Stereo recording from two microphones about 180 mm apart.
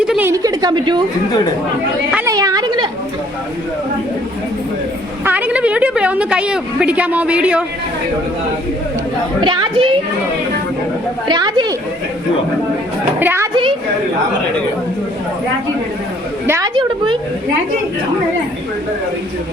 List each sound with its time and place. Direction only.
0.0 s a sound: 5° right (ahead or behind); by 1.0 s 25° right (ahead or behind)
2.2 s a sound: 20° right (ahead or behind)
5.2 s a woman's voice: 10° right (ahead or behind)
9.4 s speech: 25° right (ahead or behind)
11.3 s speech: 25° right (ahead or behind)
13.1 s a woman's voice: 10° right (ahead or behind)
13.5 s speech: 30° right (ahead or behind)
16.5 s a woman's voice: 20° right (ahead or behind)